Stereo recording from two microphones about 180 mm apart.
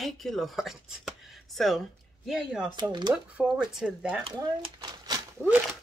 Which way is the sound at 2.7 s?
25° right (ahead or behind).